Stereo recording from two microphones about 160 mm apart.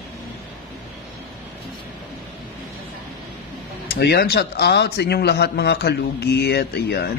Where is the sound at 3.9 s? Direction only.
90° left.